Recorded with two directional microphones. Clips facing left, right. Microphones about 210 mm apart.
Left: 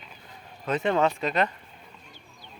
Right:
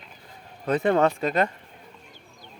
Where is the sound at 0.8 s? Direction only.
55° right (ahead or behind).